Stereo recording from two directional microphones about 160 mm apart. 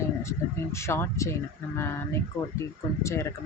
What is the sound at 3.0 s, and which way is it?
Speech, 15° left (ahead or behind).